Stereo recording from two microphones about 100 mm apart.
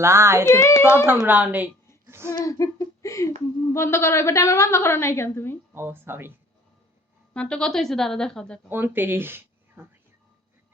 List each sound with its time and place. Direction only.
0.0 s speech: 25° right (ahead or behind)
0.4 s a woman's voice: 25° left (ahead or behind)
1.3 s speech: 15° right (ahead or behind)
2.0 s a sound: 25° right (ahead or behind)
2.4 s a sound: 35° left (ahead or behind)
3.7 s a woman's voice: 25° left (ahead or behind)
5.7 s speech: 25° right (ahead or behind)
7.3 s speech: 10° left (ahead or behind)
8.7 s speech: 20° right (ahead or behind)